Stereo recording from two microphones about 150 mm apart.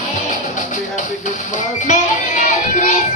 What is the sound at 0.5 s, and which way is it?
Speech, 55° left (ahead or behind).